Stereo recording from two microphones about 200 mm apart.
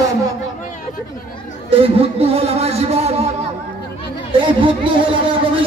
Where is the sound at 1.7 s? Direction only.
30° right (ahead or behind).